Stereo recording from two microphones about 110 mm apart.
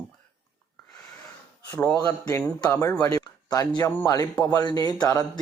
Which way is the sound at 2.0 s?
35° left (ahead or behind).